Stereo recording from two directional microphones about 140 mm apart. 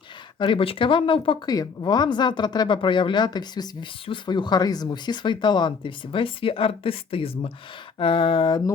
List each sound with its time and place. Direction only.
0.3 s speech: 35° left (ahead or behind)